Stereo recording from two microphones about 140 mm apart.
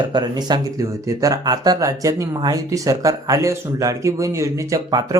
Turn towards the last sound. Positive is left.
turn(degrees=-25)  # may be behind; listen again after turning